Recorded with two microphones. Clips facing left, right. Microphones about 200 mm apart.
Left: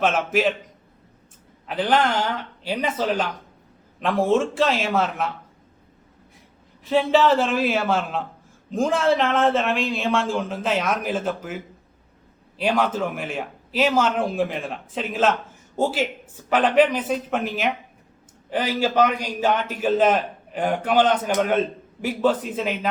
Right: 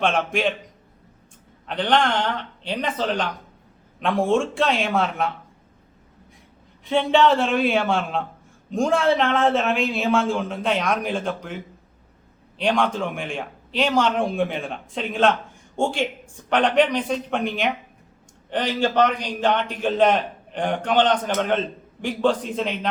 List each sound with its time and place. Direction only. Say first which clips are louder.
0.0 s a man's voice: left 1 dB; 5° left (ahead or behind)
1.6 s a man's voice: even; 5° left (ahead or behind)
6.8 s a man's voice: even; centre (ahead or behind)